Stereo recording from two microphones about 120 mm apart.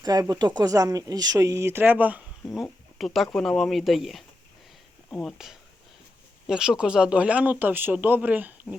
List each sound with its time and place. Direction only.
0.0 s speech: 30° right (ahead or behind); by 2.2 s 15° right (ahead or behind)
3.0 s speech: centre (ahead or behind)